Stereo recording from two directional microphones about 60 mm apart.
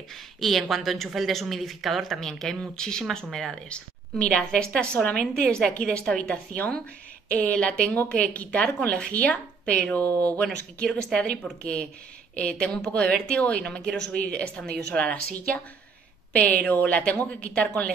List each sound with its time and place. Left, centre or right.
0.1 s a woman's voice: centre
3.6 s a woman's voice: centre
11.6 s a woman's voice: centre
12.6 s a woman's voice: centre
12.9 s a woman's voice: centre